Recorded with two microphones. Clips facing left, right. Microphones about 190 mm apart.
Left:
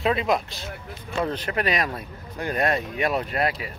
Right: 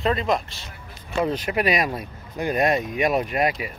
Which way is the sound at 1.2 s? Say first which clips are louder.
Right 4 dB; 10° right (ahead or behind).